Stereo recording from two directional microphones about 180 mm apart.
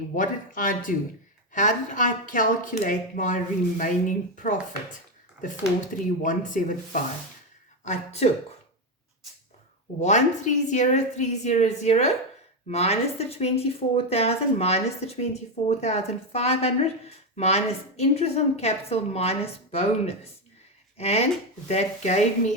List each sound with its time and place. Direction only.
0.2 s speech: 50° left (ahead or behind)
5.9 s a woman's voice: 50° left (ahead or behind)
10.0 s a woman's voice: 40° left (ahead or behind)